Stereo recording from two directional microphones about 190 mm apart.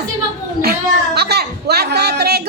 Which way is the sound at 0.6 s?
55° right (ahead or behind).